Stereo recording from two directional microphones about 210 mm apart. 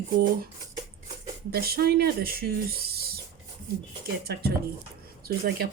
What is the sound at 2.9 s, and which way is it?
Rodents, 45° right (ahead or behind).